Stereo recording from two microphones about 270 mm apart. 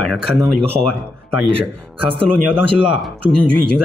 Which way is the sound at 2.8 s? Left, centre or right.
Centre.